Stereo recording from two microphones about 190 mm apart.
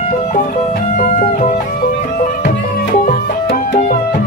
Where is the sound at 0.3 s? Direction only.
50° left (ahead or behind).